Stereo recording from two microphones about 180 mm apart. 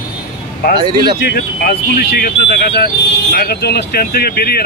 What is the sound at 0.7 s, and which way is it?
Speech, 25° right (ahead or behind).